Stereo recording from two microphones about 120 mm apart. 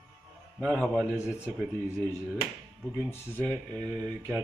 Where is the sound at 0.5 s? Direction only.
5° left (ahead or behind).